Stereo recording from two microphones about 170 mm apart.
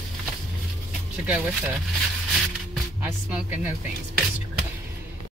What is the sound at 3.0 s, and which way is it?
Music, 10° right (ahead or behind).